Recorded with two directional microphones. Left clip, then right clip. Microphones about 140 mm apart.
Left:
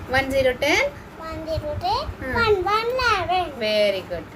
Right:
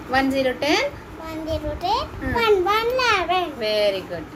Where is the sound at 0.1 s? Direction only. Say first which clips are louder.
Left 1 dB; 40° left (ahead or behind).